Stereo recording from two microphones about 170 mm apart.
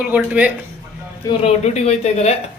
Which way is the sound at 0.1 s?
10° right (ahead or behind).